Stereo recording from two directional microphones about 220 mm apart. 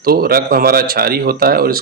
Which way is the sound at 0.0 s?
45° right (ahead or behind).